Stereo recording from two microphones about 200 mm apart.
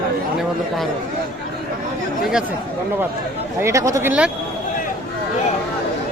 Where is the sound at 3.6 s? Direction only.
15° right (ahead or behind).